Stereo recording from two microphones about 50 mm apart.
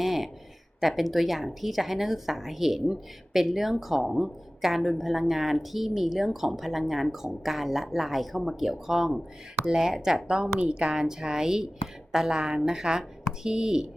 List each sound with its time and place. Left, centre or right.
0.0 s a sound: centre
0.8 s a woman's voice: centre
10.2 s speech: centre